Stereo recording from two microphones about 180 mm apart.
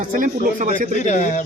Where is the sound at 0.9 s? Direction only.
40° left (ahead or behind).